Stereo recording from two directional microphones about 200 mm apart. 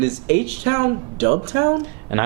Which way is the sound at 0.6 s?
15° right (ahead or behind).